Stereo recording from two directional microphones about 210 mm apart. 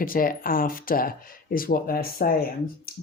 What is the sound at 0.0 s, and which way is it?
Speech, 40° left (ahead or behind).